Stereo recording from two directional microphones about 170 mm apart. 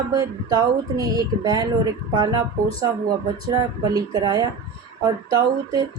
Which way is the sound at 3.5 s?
20° right (ahead or behind).